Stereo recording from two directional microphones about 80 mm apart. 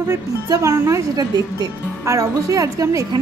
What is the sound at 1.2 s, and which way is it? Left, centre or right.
Speech, right.